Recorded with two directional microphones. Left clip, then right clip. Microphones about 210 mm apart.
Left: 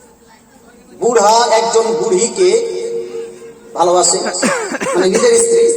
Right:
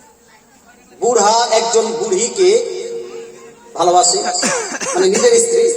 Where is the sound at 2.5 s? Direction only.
50° right (ahead or behind).